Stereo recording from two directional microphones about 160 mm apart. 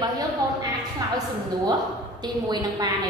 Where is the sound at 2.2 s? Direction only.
25° right (ahead or behind).